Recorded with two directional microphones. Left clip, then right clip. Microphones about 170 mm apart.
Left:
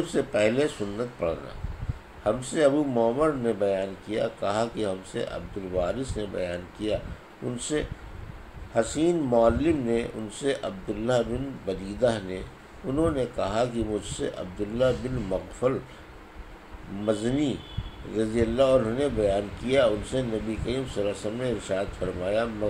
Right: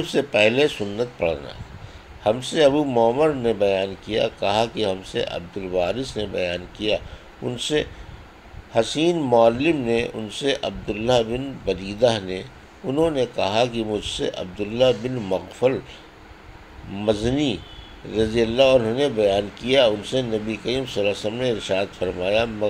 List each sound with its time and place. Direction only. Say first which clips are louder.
0.0 s speech: right 6 dB; 35° right (ahead or behind)
17.0 s speech: right 5 dB; 30° right (ahead or behind)